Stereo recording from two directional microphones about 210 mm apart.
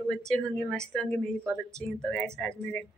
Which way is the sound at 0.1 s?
5° left (ahead or behind).